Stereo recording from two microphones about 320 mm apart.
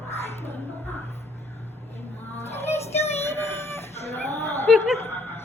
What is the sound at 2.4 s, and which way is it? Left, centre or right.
Music, centre.